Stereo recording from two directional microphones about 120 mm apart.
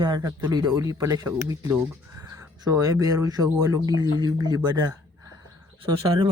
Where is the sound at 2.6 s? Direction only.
30° right (ahead or behind).